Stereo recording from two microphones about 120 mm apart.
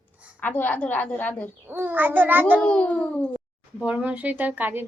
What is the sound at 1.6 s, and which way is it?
Speech, 15° right (ahead or behind).